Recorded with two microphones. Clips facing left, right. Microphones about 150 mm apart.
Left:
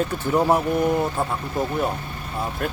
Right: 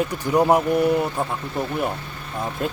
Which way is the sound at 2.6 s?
20° right (ahead or behind).